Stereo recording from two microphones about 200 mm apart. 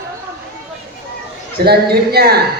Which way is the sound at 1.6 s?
50° right (ahead or behind).